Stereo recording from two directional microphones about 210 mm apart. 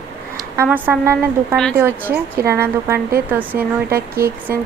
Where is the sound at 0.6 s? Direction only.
10° right (ahead or behind).